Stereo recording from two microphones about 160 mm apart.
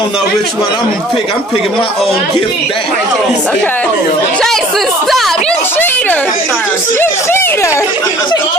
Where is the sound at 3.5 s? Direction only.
10° left (ahead or behind).